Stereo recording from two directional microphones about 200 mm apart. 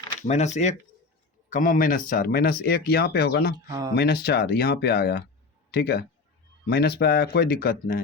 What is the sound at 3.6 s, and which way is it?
Speech, 20° right (ahead or behind).